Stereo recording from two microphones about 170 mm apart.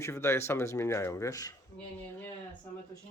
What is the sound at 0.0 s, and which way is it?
Speech, 15° left (ahead or behind).